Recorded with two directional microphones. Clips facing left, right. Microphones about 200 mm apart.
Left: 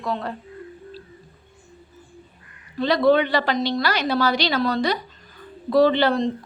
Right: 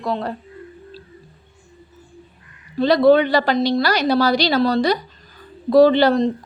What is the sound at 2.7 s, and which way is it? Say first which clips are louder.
A woman's voice: right 4 dB; 35° right (ahead or behind).